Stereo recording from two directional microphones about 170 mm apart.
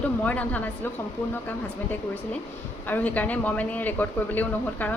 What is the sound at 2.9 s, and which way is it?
A man's voice, 10° left (ahead or behind).